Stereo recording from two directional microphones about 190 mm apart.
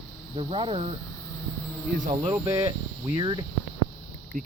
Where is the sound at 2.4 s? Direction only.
15° right (ahead or behind).